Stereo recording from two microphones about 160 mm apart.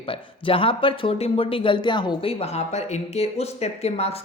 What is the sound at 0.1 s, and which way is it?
Speech, 35° left (ahead or behind).